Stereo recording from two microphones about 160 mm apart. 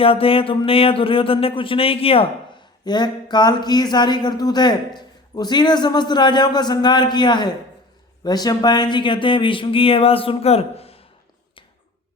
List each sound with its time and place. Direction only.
0.0 s speech: 35° left (ahead or behind)